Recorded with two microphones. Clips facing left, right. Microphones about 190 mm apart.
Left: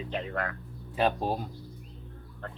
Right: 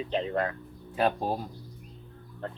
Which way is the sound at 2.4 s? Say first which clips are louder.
Right 5 dB; 25° right (ahead or behind).